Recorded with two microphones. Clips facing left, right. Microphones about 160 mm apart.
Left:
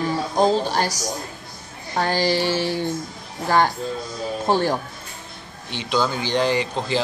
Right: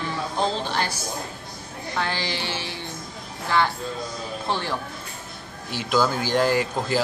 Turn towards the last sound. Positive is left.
turn(degrees=-5)  # may be behind; listen again after turning